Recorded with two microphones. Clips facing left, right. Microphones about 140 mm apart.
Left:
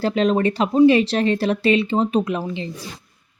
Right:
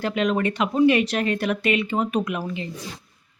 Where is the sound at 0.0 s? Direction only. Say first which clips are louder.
Left 4 dB; 30° left (ahead or behind).